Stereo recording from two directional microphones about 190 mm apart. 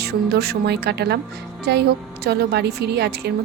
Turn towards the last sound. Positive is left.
turn(degrees=-60)  # may be behind; listen again after turning